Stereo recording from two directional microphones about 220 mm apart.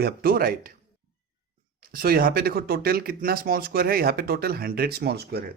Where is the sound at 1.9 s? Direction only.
40° right (ahead or behind).